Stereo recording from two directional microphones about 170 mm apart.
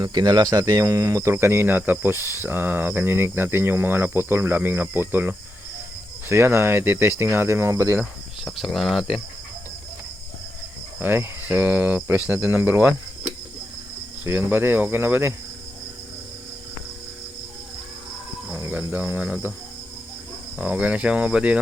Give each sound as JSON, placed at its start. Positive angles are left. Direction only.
{"t": 0.0, "sound": "speech", "side_deg": -25}
{"t": 8.4, "sound": "speech", "side_deg": 0}
{"t": 11.0, "sound": "speech", "side_deg": -10}
{"t": 18.5, "sound": "speech", "side_deg": -15}
{"t": 20.6, "sound": "speech", "side_deg": -10}